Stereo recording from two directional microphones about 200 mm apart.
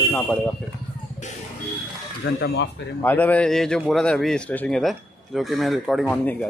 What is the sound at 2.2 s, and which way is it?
Speech, 55° left (ahead or behind).